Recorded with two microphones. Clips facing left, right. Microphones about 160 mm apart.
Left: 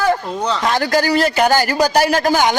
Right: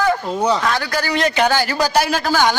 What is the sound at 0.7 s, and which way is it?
Speech, 40° left (ahead or behind).